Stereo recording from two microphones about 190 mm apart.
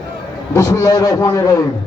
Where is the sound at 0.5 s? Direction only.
15° left (ahead or behind).